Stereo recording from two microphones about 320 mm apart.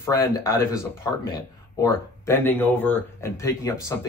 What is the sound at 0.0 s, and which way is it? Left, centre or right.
Speech, centre.